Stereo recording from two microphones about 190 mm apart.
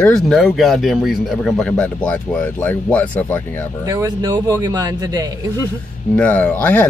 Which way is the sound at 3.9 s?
20° right (ahead or behind).